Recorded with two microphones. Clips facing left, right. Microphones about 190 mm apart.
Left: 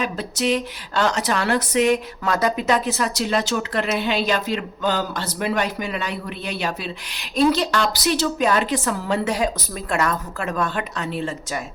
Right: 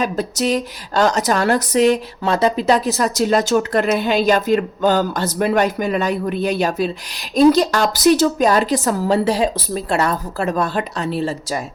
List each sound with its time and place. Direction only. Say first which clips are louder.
0.0 s speech: right 4 dB; 40° right (ahead or behind)